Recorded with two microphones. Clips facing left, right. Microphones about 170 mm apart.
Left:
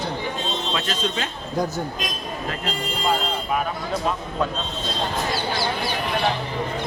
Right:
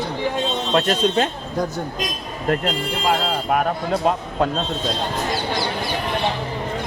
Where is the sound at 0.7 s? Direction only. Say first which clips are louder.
Right 11 dB; 60° right (ahead or behind).